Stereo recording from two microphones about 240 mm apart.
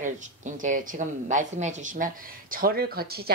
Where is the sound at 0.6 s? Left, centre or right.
Right.